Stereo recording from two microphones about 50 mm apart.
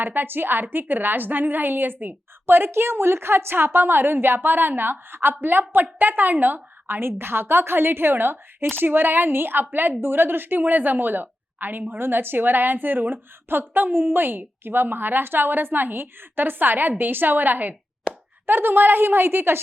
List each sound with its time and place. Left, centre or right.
0.0 s a woman's voice: right
11.9 s a woman's voice: right
18.1 s plop: centre
18.4 s a woman's voice: right